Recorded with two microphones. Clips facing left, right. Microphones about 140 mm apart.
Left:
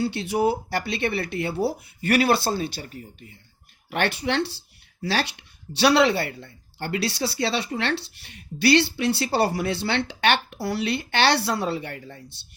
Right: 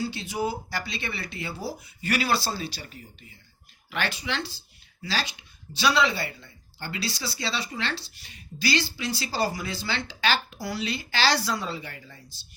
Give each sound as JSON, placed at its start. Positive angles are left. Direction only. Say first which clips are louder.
{"t": 0.0, "sound": "speech", "louder": "left 6 dB", "side_deg": 65}